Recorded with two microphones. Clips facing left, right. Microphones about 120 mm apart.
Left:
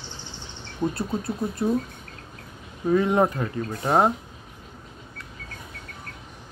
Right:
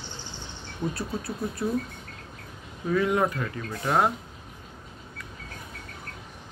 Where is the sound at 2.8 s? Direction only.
30° left (ahead or behind).